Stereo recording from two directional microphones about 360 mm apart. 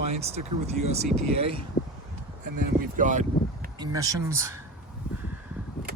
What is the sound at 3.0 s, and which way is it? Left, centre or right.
Speech, right.